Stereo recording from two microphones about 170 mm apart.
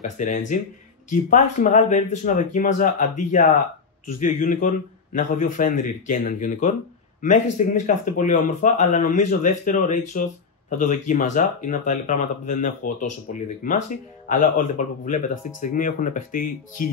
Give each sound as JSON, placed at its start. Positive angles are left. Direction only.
{"t": 0.0, "sound": "speech", "side_deg": 45}